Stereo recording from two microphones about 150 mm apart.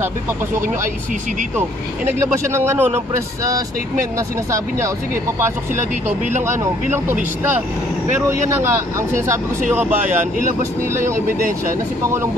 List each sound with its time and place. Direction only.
2.3 s speech: 15° right (ahead or behind)
6.4 s speech: 15° right (ahead or behind)
9.7 s speech: 10° right (ahead or behind)